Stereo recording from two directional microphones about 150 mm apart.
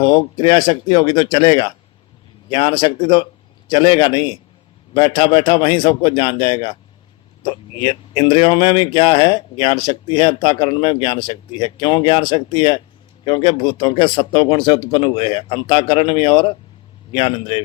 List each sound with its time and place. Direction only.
0.0 s speech: 30° left (ahead or behind)